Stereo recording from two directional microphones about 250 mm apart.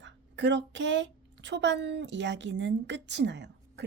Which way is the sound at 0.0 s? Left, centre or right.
Right.